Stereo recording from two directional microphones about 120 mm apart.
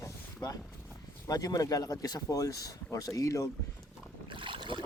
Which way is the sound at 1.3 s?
30° left (ahead or behind).